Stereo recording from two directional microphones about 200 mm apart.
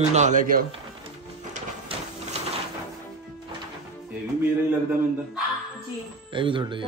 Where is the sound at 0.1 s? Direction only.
35° right (ahead or behind).